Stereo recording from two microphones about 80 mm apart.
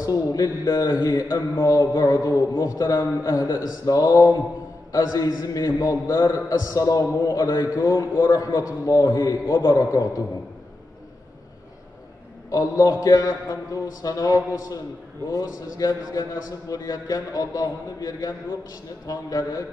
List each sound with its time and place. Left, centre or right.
0.0 s a man's voice: left
2.0 s a sound: left
2.5 s a man's voice: left
12.4 s a man's voice: left